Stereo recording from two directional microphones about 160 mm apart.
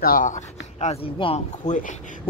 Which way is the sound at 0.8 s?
40° left (ahead or behind).